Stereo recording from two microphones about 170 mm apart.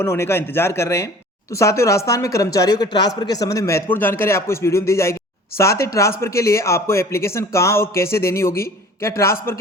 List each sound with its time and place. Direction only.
0.0 s speech: 15° left (ahead or behind)